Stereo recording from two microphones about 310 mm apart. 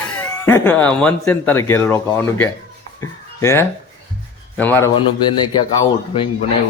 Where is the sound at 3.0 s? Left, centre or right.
Centre.